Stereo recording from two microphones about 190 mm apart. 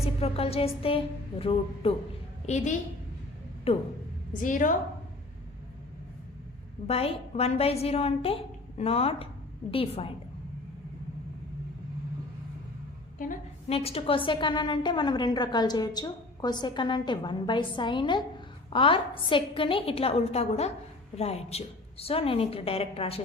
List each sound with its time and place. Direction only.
0.0 s a woman's voice: 30° left (ahead or behind)
3.7 s a woman's voice: 30° left (ahead or behind)
4.4 s a woman's voice: 45° left (ahead or behind)
6.8 s a woman's voice: 30° left (ahead or behind)
13.1 s a woman's voice: 45° left (ahead or behind)